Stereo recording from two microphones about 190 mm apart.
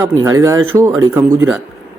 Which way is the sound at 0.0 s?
15° right (ahead or behind).